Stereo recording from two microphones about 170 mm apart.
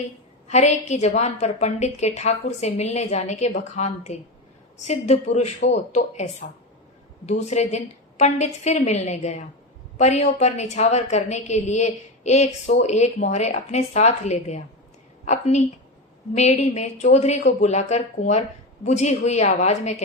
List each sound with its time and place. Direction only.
0.4 s a woman's voice: 40° left (ahead or behind)
7.3 s a woman's voice: 40° left (ahead or behind)